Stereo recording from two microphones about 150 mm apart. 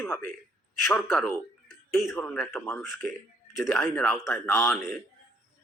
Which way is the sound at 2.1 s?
10° left (ahead or behind).